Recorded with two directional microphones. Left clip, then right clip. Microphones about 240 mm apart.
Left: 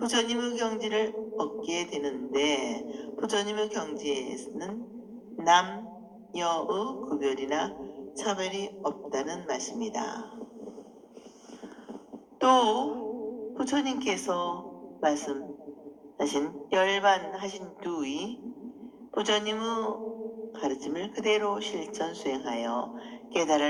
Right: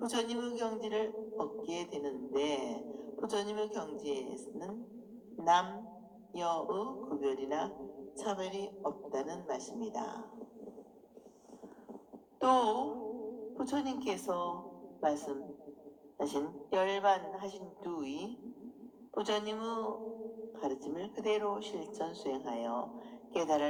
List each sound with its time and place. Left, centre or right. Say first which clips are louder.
0.0 s a man's voice: left 8 dB; left
12.4 s a man's voice: left 7 dB; left